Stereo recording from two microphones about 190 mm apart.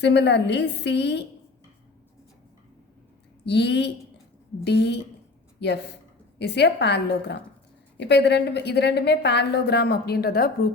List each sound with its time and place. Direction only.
0.0 s a woman's voice: 65° left (ahead or behind)
3.4 s a woman's voice: 65° left (ahead or behind)